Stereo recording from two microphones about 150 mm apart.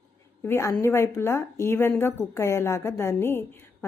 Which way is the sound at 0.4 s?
20° left (ahead or behind).